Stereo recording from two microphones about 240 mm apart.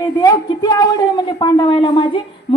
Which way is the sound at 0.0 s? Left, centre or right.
Centre.